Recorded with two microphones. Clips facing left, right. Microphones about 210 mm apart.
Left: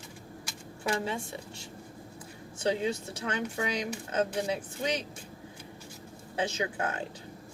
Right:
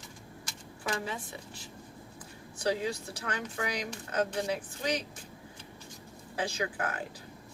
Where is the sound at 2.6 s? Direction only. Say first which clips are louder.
Left 2 dB; 25° left (ahead or behind).